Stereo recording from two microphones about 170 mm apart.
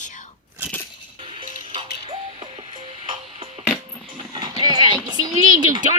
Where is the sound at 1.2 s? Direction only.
30° right (ahead or behind).